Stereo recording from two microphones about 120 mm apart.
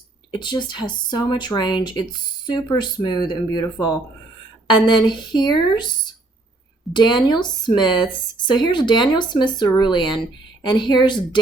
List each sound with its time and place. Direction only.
0.3 s speech: 40° left (ahead or behind)
6.9 s speech: 40° left (ahead or behind)